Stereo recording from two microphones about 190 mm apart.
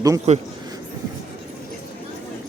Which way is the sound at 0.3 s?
35° right (ahead or behind).